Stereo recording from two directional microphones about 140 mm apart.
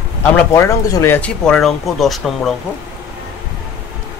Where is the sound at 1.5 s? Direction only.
Centre (ahead or behind).